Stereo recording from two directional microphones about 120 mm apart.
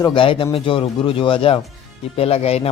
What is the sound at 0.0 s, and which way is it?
Speech, 45° left (ahead or behind).